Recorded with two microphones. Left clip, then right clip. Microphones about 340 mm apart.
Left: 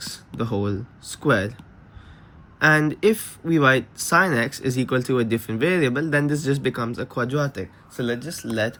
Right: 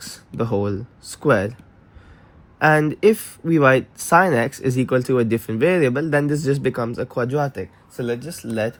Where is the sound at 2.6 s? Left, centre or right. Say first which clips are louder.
Right 2 dB; centre.